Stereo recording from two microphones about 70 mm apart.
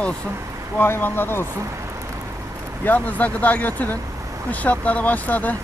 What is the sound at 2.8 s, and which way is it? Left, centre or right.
Speech, left.